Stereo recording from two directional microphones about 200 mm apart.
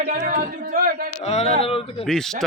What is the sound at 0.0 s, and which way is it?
Speech, 40° right (ahead or behind).